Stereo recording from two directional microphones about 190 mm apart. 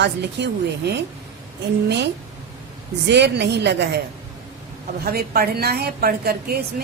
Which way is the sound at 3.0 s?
65° right (ahead or behind).